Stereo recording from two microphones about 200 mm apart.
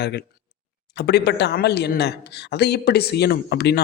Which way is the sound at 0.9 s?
55° left (ahead or behind).